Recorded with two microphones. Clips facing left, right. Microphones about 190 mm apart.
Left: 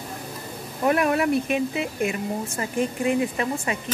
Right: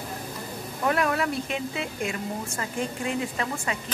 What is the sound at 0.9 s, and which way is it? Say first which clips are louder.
A woman's voice: left 5 dB; 20° left (ahead or behind).